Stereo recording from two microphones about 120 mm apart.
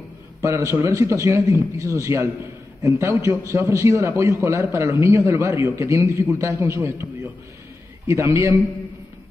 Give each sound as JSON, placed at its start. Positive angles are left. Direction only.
{"t": 0.4, "sound": "a man's voice", "side_deg": -25}
{"t": 8.1, "sound": "a man's voice", "side_deg": -20}